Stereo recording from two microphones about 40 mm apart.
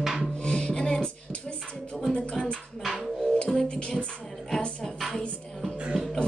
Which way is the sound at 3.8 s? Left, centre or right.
Left.